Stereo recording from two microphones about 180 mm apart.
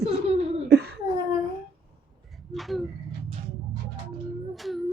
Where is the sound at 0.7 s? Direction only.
60° right (ahead or behind).